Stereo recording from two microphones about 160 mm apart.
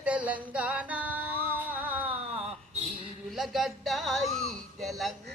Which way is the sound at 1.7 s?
10° right (ahead or behind).